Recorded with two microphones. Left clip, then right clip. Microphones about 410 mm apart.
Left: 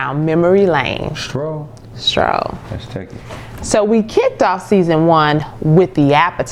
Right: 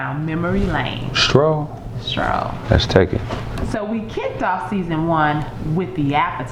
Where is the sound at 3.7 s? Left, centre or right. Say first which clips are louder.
Left 13 dB; left.